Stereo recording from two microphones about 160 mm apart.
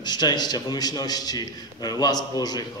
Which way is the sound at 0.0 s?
25° left (ahead or behind).